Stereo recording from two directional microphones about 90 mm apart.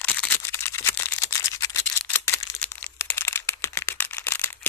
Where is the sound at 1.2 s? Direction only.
30° left (ahead or behind).